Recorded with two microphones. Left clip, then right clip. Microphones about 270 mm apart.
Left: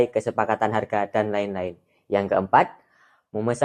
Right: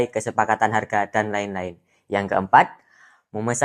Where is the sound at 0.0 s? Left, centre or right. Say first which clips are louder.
Even; right.